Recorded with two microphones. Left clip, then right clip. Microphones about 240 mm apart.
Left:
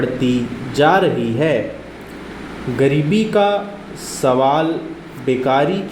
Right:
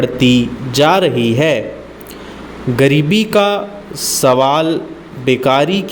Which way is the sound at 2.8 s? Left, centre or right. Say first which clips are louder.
Right 4 dB; right.